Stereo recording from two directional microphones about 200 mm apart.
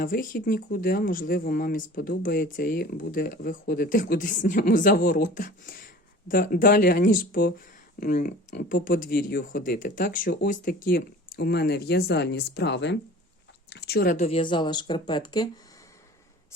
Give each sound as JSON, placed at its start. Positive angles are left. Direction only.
{"t": 0.0, "sound": "speech", "side_deg": 45}
{"t": 14.2, "sound": "speech", "side_deg": 30}